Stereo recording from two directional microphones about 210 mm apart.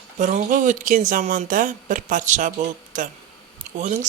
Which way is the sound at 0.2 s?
35° right (ahead or behind).